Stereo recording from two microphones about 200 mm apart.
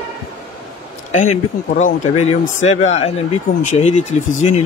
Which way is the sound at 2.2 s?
35° left (ahead or behind).